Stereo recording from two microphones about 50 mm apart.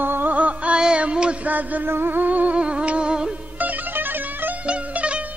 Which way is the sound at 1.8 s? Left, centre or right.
Right.